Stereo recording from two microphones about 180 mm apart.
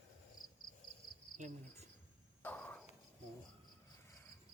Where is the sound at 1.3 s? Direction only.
40° right (ahead or behind).